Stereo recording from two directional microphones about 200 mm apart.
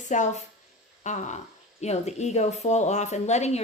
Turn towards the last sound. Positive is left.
turn(degrees=35)  # may be behind; listen again after turning